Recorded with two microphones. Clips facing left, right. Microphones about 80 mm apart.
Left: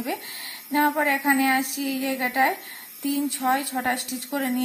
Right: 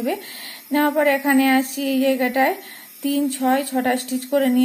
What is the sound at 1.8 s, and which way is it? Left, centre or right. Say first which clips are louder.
Speech: right 8 dB; left.